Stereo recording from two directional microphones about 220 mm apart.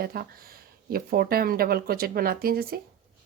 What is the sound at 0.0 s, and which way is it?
Speech, 40° right (ahead or behind).